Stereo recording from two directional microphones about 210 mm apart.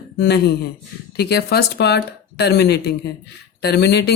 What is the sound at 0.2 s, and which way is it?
Speech, 50° left (ahead or behind).